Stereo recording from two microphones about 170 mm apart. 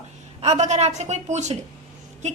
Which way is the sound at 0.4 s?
40° right (ahead or behind).